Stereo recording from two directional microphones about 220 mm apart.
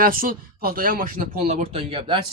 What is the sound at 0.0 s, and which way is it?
Speech, 40° right (ahead or behind).